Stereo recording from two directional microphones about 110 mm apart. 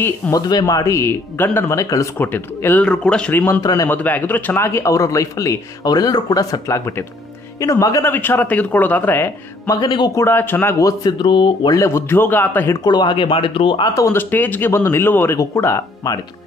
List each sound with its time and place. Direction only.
0.3 s speech: 35° left (ahead or behind)
2.1 s speech: 20° left (ahead or behind)
3.3 s a man's voice: 20° left (ahead or behind)
3.6 s speech: 30° left (ahead or behind)
3.9 s a man's voice: 15° left (ahead or behind)
8.0 s speech: 20° left (ahead or behind)
9.7 s speech: 40° left (ahead or behind)
10.1 s a man's voice: 20° left (ahead or behind)
10.9 s speech: 40° left (ahead or behind)
11.7 s a man's voice: 25° left (ahead or behind)
12.8 s speech: 40° left (ahead or behind)
13.8 s speech: 30° left (ahead or behind)
14.1 s a man's voice: 15° left (ahead or behind)